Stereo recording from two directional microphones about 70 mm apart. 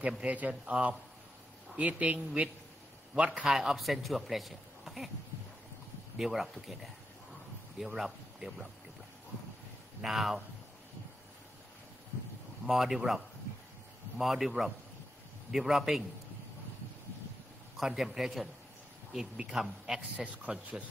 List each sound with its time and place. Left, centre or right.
0.2 s a man's voice: right
3.4 s speech: centre
6.1 s speech: centre
10.0 s speech: centre
12.6 s speech: centre
17.7 s a man's voice: centre